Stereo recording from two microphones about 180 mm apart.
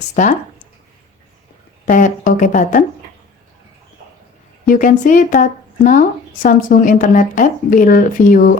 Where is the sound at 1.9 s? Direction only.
45° left (ahead or behind).